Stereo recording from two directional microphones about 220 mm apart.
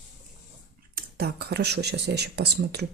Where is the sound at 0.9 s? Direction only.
45° right (ahead or behind).